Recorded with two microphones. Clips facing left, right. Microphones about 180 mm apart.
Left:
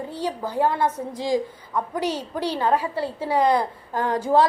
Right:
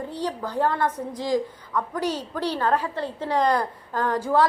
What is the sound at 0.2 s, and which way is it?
A woman's voice, 10° left (ahead or behind).